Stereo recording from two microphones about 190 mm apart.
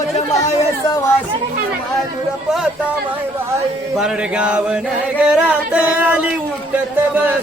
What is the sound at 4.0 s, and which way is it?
Mantra, 5° right (ahead or behind).